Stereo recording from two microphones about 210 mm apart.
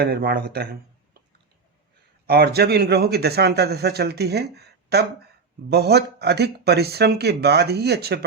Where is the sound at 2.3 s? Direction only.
50° right (ahead or behind).